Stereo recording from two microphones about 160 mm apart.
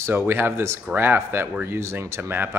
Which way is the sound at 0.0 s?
15° right (ahead or behind).